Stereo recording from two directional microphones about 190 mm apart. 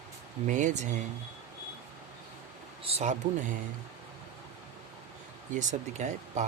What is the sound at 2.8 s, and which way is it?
Speech, 35° right (ahead or behind).